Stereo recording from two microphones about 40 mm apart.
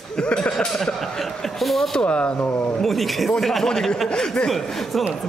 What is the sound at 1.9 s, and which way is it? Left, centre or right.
Speech, left.